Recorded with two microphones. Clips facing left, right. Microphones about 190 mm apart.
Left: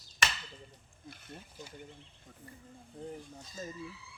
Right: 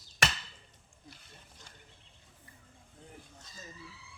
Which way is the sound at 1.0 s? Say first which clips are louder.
Left 7 dB; 55° left (ahead or behind).